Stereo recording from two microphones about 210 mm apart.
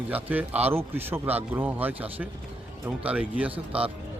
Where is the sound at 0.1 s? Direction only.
5° right (ahead or behind).